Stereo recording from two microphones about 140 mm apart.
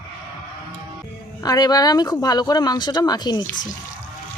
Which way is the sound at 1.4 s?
30° left (ahead or behind).